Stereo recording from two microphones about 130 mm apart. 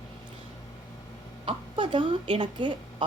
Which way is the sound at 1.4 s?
45° right (ahead or behind).